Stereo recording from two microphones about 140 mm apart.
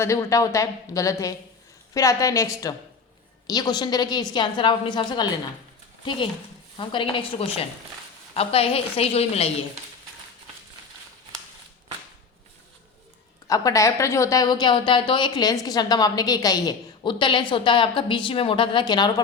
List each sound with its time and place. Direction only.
0.0 s a woman's voice: 20° left (ahead or behind)
6.7 s a woman's voice: 35° left (ahead or behind)
13.5 s a woman's voice: 25° left (ahead or behind)